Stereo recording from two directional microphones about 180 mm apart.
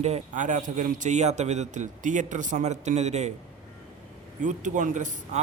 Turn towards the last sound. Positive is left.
turn(degrees=-45)  # may be behind; listen again after turning